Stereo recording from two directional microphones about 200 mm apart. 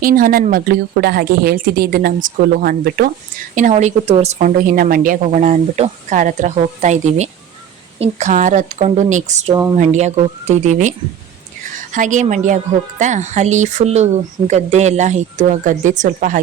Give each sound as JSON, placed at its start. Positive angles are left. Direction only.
{"t": 0.0, "sound": "a woman's voice", "side_deg": -45}
{"t": 3.5, "sound": "a woman's voice", "side_deg": -35}